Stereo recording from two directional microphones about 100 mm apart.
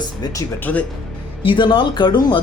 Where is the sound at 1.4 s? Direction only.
55° left (ahead or behind).